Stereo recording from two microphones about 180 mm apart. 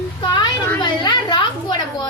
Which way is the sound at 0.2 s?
25° left (ahead or behind).